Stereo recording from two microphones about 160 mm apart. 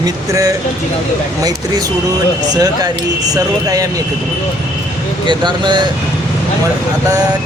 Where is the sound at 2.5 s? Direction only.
25° right (ahead or behind).